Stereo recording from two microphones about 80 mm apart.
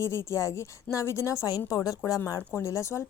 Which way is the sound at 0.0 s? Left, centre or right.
Left.